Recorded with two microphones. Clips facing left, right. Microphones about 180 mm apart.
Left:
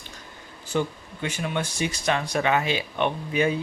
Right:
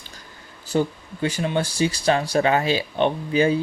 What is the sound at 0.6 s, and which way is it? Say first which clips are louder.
Speech: right 4 dB; 35° right (ahead or behind).